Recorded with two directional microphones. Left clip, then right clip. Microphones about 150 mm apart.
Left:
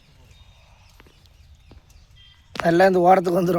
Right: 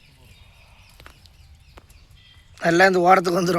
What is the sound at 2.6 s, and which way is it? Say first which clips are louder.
Speech: even; 20° left (ahead or behind).